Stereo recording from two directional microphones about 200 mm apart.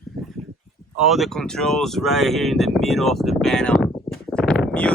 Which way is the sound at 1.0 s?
Centre (ahead or behind).